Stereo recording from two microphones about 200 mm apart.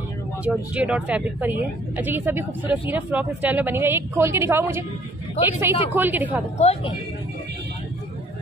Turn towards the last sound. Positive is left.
turn(degrees=30)  # may be behind; listen again after turning